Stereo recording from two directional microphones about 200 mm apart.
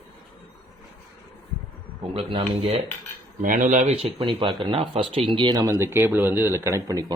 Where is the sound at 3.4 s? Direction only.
40° right (ahead or behind).